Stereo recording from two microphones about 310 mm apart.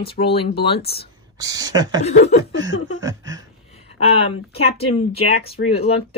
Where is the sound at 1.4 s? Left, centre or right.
Centre.